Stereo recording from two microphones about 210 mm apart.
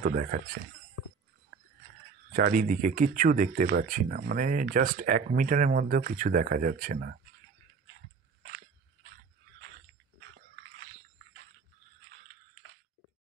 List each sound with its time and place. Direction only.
0.0 s speech: 40° right (ahead or behind)
1.5 s a sound: 50° right (ahead or behind)
2.3 s speech: 40° right (ahead or behind)
8.4 s biting: 60° right (ahead or behind)